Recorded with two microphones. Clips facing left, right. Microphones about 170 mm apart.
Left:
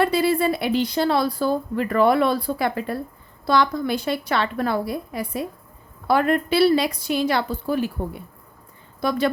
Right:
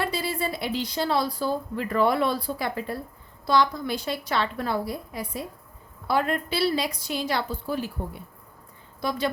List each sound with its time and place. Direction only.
0.0 s a woman's voice: 60° left (ahead or behind)
9.0 s a woman's voice: 60° left (ahead or behind)